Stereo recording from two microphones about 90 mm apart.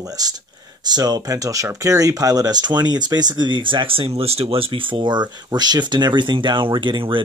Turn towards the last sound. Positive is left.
turn(degrees=-65)  # may be behind; listen again after turning